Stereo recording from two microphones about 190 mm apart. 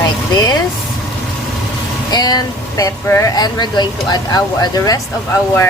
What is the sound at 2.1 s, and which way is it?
Speech, 20° left (ahead or behind).